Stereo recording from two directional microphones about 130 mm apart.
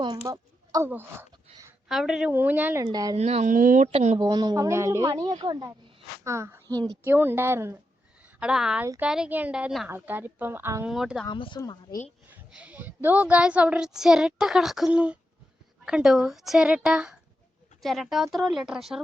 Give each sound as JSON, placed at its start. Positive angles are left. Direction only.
{"t": 0.0, "sound": "a woman's voice", "side_deg": -30}
{"t": 0.9, "sound": "speech", "side_deg": -15}
{"t": 1.9, "sound": "a woman's voice", "side_deg": -5}
{"t": 2.8, "sound": "a woman's voice", "side_deg": -30}
{"t": 3.2, "sound": "speech", "side_deg": -55}
{"t": 3.5, "sound": "speech", "side_deg": -90}
{"t": 3.9, "sound": "speech", "side_deg": -60}
{"t": 4.2, "sound": "a woman's voice", "side_deg": -30}
{"t": 6.2, "sound": "a woman's voice", "side_deg": -20}
{"t": 7.0, "sound": "speech", "side_deg": -15}
{"t": 8.4, "sound": "speech", "side_deg": -5}
{"t": 10.8, "sound": "a woman's voice", "side_deg": -5}
{"t": 11.3, "sound": "speech", "side_deg": 35}
{"t": 12.5, "sound": "a woman's voice", "side_deg": -10}